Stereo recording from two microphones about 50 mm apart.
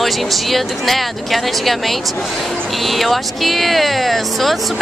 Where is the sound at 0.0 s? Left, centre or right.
Centre.